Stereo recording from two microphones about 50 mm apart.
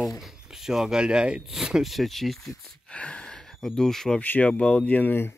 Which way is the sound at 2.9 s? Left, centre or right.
Left.